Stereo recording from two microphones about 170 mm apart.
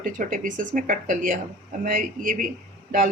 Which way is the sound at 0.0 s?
50° right (ahead or behind).